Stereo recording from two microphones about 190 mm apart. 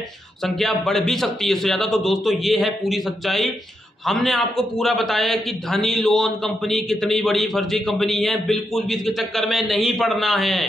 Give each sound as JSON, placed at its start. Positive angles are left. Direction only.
{"t": 0.4, "sound": "a man's voice", "side_deg": 0}